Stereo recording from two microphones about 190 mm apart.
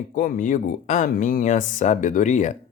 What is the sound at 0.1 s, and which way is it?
Speech, 45° left (ahead or behind).